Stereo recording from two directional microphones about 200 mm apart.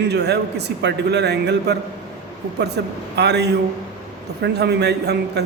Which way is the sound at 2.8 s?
55° right (ahead or behind).